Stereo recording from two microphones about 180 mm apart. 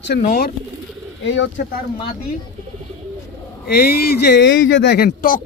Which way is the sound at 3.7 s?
60° left (ahead or behind).